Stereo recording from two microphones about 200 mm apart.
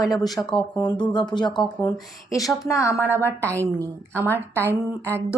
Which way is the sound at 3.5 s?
15° right (ahead or behind).